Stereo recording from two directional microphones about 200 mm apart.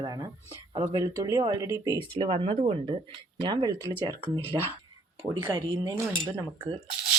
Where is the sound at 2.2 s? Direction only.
25° right (ahead or behind).